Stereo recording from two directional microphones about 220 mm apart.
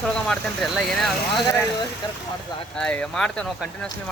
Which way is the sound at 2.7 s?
5° left (ahead or behind).